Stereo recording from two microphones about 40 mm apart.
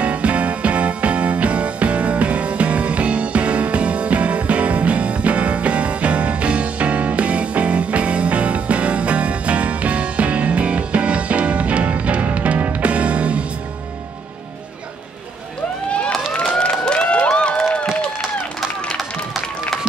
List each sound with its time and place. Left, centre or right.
0.0 s music: right
16.4 s a sound: left
18.9 s run: centre